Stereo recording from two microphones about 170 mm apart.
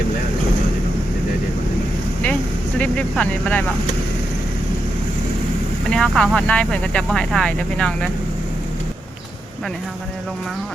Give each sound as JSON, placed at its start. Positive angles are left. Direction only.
{"t": 2.7, "sound": "speech", "side_deg": 5}
{"t": 5.9, "sound": "speech", "side_deg": 5}